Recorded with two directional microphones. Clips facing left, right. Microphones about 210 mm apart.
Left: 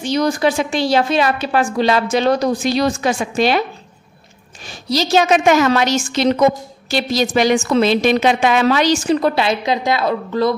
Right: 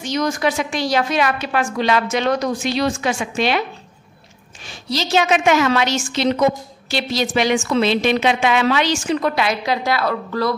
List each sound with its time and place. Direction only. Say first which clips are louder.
0.0 s a woman's voice: left 4 dB; 30° left (ahead or behind)
4.6 s a woman's voice: left 5 dB; 40° left (ahead or behind); by 10.5 s 20° left (ahead or behind)